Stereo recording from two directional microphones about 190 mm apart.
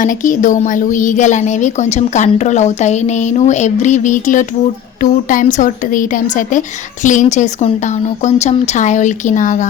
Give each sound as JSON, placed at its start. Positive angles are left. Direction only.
{"t": 0.0, "sound": "a woman's voice", "side_deg": 45}